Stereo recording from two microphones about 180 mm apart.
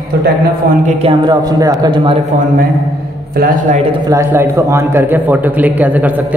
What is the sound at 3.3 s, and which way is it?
Speech, 55° right (ahead or behind).